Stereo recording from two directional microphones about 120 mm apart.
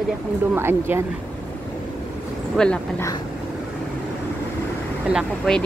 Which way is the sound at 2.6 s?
5° left (ahead or behind).